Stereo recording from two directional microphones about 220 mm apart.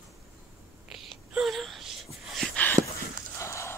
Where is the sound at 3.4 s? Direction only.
10° left (ahead or behind).